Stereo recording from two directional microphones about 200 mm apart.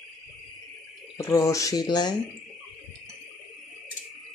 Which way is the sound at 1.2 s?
15° left (ahead or behind).